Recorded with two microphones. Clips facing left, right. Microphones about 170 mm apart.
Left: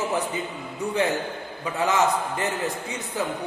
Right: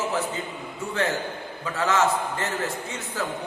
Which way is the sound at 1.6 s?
15° left (ahead or behind).